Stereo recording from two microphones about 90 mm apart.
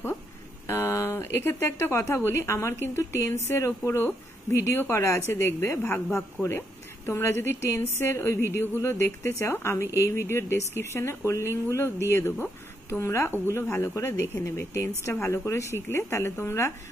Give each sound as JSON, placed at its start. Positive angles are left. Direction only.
{"t": 0.7, "sound": "speech", "side_deg": 25}
{"t": 5.8, "sound": "speech", "side_deg": 15}
{"t": 6.1, "sound": "speech", "side_deg": 25}